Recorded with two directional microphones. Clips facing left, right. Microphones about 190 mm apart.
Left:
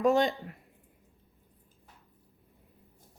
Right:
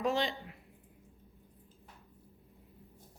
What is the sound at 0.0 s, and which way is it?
Speech, 45° left (ahead or behind).